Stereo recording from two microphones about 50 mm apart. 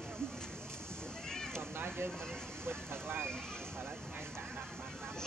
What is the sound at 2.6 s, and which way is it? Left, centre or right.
Speech, right.